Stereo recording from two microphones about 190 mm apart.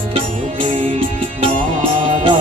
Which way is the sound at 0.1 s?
30° right (ahead or behind).